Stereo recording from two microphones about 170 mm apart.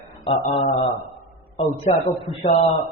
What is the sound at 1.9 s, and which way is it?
Speech, 40° left (ahead or behind).